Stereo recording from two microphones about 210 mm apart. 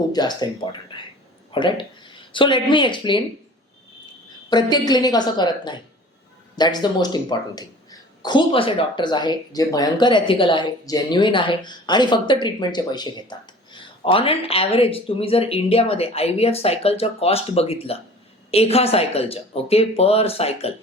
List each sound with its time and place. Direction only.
0.1 s speech: 20° left (ahead or behind)
4.4 s speech: 20° left (ahead or behind)